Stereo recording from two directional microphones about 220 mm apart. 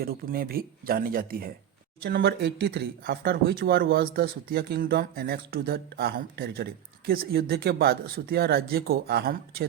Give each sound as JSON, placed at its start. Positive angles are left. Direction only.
{"t": 0.0, "sound": "speech", "side_deg": -45}